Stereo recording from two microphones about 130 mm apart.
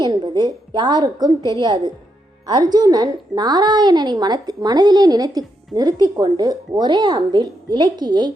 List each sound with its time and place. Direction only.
0.0 s a woman's voice: 35° right (ahead or behind)